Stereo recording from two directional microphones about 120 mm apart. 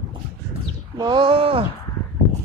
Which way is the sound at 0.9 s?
35° right (ahead or behind).